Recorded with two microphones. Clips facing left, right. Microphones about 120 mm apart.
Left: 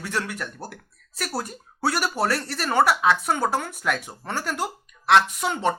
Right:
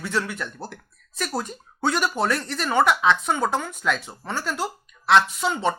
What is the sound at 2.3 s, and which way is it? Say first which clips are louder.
Speech: even; 20° right (ahead or behind).